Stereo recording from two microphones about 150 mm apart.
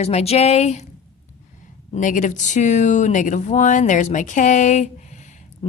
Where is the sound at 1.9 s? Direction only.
60° left (ahead or behind).